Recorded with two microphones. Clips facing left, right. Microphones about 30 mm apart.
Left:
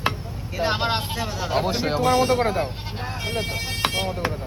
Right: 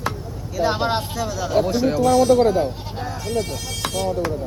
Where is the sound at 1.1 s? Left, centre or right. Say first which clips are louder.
Right 4 dB; left.